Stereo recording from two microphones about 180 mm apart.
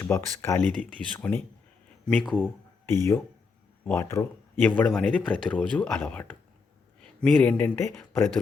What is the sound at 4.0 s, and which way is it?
Speech, 15° left (ahead or behind).